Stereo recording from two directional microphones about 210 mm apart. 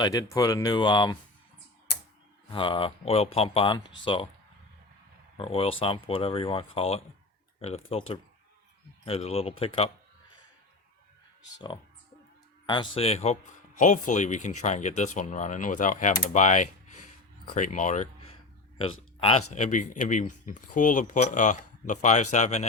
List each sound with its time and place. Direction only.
0.0 s speech: 15° left (ahead or behind)
2.5 s speech: 25° left (ahead or behind)
5.4 s speech: 25° left (ahead or behind)
12.6 s speech: 20° left (ahead or behind)
19.5 s speech: 35° left (ahead or behind)